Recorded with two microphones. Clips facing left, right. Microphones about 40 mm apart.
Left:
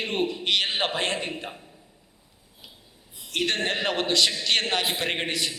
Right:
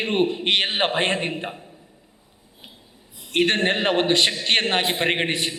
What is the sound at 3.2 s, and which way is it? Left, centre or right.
A man's voice, right.